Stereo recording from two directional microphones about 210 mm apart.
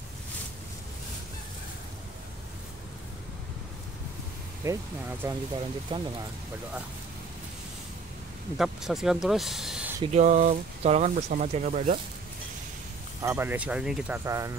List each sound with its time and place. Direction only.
4.6 s speech: 15° right (ahead or behind)
5.9 s speech: 25° right (ahead or behind)
8.5 s speech: centre (ahead or behind)
10.1 s speech: 35° right (ahead or behind)
13.2 s speech: 10° right (ahead or behind)